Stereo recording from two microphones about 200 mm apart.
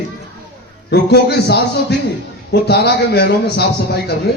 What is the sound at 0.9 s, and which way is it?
A man's voice, 55° left (ahead or behind).